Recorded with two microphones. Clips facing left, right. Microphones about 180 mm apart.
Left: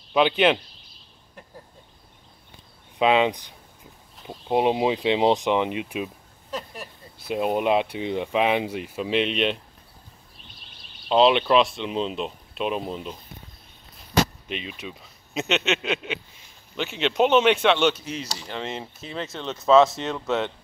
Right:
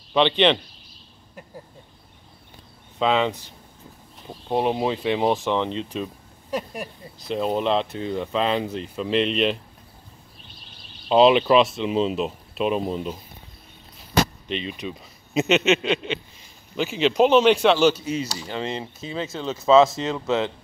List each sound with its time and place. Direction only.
0.1 s speech: 5° left (ahead or behind)
3.0 s speech: 15° left (ahead or behind)
6.5 s speech: 10° right (ahead or behind)
7.2 s speech: 10° left (ahead or behind)
11.1 s speech: centre (ahead or behind)
14.5 s speech: 5° left (ahead or behind)